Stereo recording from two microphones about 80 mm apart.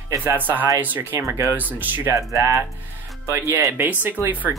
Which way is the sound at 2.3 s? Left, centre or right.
Right.